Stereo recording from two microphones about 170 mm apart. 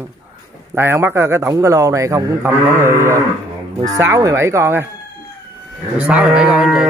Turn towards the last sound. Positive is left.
turn(degrees=-5)  # may be behind; listen again after turning